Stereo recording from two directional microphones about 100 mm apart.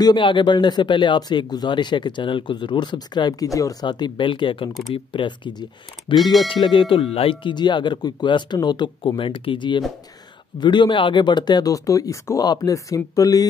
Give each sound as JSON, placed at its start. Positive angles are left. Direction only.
{"t": 0.0, "sound": "speech", "side_deg": 50}
{"t": 3.8, "sound": "speech", "side_deg": 45}
{"t": 7.5, "sound": "speech", "side_deg": 50}